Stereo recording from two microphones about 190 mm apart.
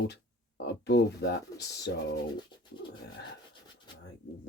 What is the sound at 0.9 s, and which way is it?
Speech, 60° left (ahead or behind).